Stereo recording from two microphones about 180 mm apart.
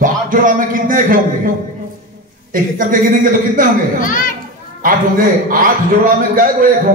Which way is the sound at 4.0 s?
50° left (ahead or behind).